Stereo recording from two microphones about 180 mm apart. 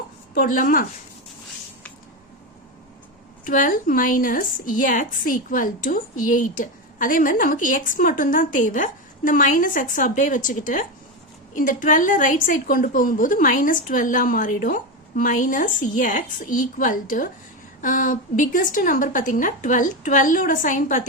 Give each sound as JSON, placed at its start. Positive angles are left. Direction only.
{"t": 0.3, "sound": "a woman's voice", "side_deg": 50}
{"t": 3.5, "sound": "a woman's voice", "side_deg": 50}